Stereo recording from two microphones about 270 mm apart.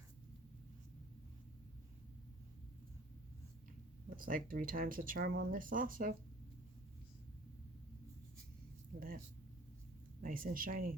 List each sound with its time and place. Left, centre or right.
4.2 s speech: right
9.0 s speech: right
10.2 s speech: right